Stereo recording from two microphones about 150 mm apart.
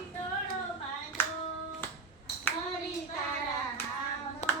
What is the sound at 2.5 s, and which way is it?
Clapping, 15° left (ahead or behind).